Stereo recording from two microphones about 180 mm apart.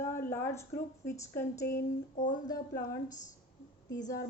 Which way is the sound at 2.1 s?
45° left (ahead or behind).